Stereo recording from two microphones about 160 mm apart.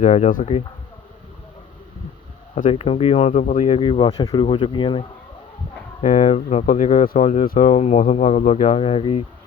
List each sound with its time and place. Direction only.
0.0 s speech: 50° left (ahead or behind)
2.6 s speech: 40° left (ahead or behind)
3.8 s speech: 35° left (ahead or behind)
6.0 s speech: 50° left (ahead or behind)
7.4 s speech: 60° left (ahead or behind)
7.7 s speech: 45° left (ahead or behind)